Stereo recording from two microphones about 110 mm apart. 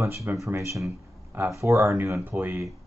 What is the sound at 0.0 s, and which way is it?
Speech, 25° right (ahead or behind).